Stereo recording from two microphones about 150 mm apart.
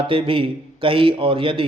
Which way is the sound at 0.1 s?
35° right (ahead or behind).